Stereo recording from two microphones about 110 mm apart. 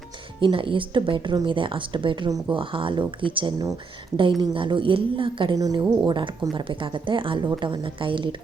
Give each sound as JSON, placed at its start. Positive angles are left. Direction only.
{"t": 0.3, "sound": "speech", "side_deg": -50}
{"t": 5.5, "sound": "speech", "side_deg": -40}